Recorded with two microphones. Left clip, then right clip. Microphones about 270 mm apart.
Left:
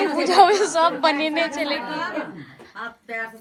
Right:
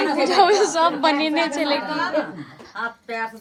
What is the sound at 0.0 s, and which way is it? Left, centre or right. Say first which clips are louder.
A woman's voice: left 1 dB; centre.